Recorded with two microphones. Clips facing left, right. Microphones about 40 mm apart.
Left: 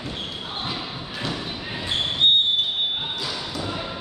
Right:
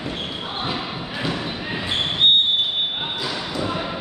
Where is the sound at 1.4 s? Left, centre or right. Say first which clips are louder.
Right 4 dB; right.